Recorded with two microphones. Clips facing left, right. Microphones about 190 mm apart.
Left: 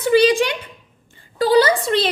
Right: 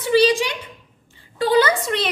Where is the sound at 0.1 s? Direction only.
55° left (ahead or behind).